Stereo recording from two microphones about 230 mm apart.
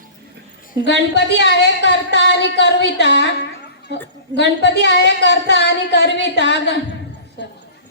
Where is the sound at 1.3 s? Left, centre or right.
Left.